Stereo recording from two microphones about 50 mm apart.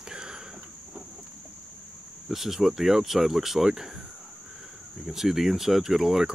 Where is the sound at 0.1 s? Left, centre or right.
Centre.